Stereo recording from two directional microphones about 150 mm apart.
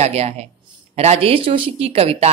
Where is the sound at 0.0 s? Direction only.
45° right (ahead or behind).